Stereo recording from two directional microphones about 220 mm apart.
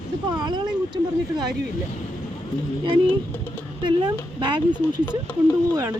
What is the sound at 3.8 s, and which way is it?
Speech, 20° right (ahead or behind).